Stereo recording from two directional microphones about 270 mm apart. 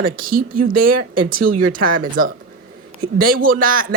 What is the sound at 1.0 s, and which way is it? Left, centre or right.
Speech, right.